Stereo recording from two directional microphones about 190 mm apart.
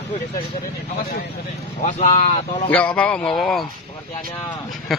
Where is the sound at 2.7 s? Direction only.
5° left (ahead or behind).